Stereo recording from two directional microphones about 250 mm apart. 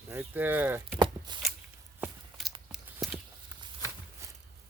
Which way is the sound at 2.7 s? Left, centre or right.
Centre.